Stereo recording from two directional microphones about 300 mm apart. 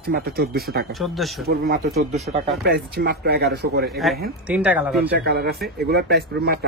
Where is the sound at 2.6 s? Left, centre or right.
Right.